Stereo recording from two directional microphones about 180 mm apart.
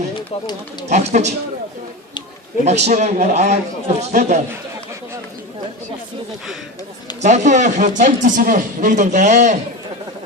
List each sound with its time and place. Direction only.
0.2 s speech: 25° left (ahead or behind)
0.9 s a man's voice: 40° right (ahead or behind)
2.6 s a man's voice: 40° right (ahead or behind)
7.2 s speech: 40° right (ahead or behind)